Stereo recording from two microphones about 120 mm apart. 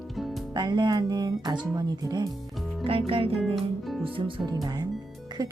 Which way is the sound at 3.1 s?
50° right (ahead or behind).